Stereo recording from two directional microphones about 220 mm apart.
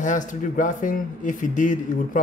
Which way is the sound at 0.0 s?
35° left (ahead or behind).